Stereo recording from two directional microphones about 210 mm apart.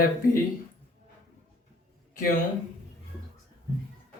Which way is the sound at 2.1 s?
40° left (ahead or behind).